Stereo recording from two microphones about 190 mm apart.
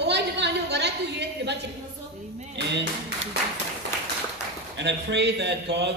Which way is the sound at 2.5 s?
65° right (ahead or behind).